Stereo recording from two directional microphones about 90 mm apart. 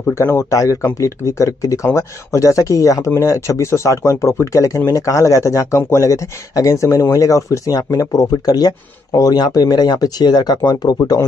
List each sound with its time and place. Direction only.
0.1 s speech: 30° left (ahead or behind); by 11.0 s 50° left (ahead or behind)